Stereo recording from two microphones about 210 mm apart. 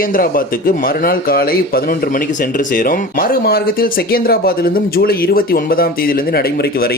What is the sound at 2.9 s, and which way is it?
Speech, 45° left (ahead or behind).